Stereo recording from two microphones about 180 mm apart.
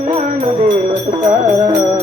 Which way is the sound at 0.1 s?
45° right (ahead or behind).